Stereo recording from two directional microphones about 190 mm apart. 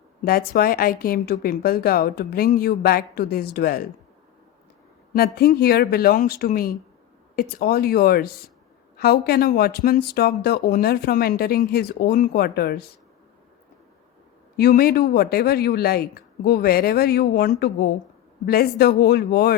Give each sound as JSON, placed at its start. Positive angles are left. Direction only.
{"t": 0.3, "sound": "a woman's voice", "side_deg": 55}
{"t": 5.1, "sound": "a woman's voice", "side_deg": 55}
{"t": 14.5, "sound": "speech", "side_deg": 55}